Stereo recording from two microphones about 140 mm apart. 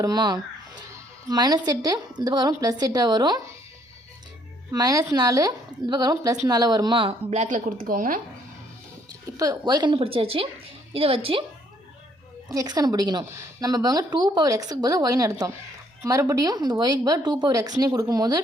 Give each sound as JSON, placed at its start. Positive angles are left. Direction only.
{"t": 0.0, "sound": "a woman's voice", "side_deg": -30}
{"t": 4.7, "sound": "a woman's voice", "side_deg": -25}
{"t": 7.3, "sound": "a woman's voice", "side_deg": -60}
{"t": 9.4, "sound": "speech", "side_deg": -25}
{"t": 12.5, "sound": "a woman's voice", "side_deg": -25}